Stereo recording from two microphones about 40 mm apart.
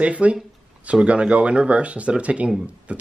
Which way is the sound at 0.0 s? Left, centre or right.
Right.